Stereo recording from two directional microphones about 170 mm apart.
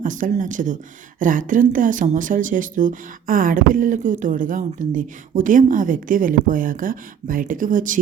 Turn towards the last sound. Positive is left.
turn(degrees=-50)  # may be behind; listen again after turning